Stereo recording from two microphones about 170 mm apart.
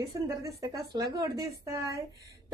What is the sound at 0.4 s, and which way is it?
A woman's voice, 20° right (ahead or behind).